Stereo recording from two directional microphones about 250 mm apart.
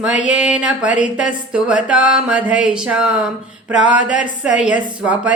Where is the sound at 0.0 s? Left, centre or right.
Centre.